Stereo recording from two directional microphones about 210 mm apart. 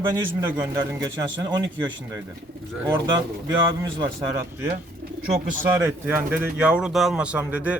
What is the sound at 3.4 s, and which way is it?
Speech, 15° right (ahead or behind).